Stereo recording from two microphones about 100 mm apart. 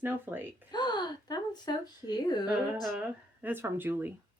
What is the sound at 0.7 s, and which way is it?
Speech, 45° left (ahead or behind).